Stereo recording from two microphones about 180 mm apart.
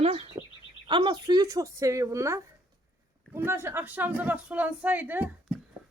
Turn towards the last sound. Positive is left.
turn(degrees=-10)  # may be behind; listen again after turning